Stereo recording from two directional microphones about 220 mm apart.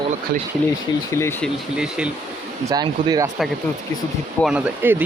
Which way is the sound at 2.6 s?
20° right (ahead or behind).